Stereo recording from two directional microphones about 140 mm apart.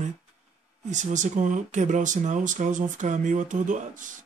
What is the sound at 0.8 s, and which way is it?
Speech, 60° right (ahead or behind).